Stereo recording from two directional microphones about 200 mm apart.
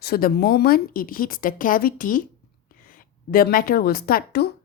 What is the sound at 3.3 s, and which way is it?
A woman's voice, 45° left (ahead or behind).